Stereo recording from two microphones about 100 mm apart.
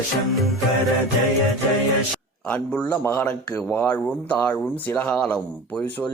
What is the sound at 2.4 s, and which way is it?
Speech, 10° left (ahead or behind).